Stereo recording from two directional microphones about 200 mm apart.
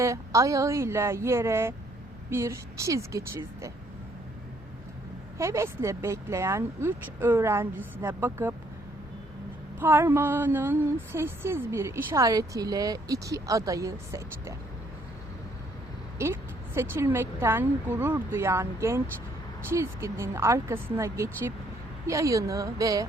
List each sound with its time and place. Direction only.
0.0 s speech: 15° right (ahead or behind)
5.4 s speech: 15° right (ahead or behind)
9.8 s speech: 10° right (ahead or behind)
16.1 s speech: 15° right (ahead or behind)